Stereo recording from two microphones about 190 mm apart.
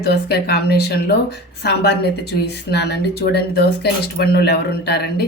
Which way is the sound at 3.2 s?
55° left (ahead or behind).